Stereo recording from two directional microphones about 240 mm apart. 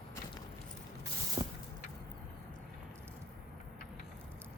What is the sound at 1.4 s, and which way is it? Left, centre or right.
Vehicle, centre.